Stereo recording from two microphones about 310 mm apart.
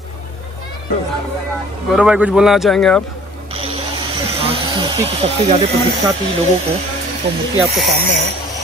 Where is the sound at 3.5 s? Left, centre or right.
Centre.